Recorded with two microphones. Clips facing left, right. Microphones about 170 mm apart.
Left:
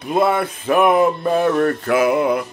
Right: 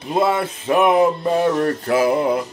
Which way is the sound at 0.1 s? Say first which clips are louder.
Left 1 dB; 25° right (ahead or behind).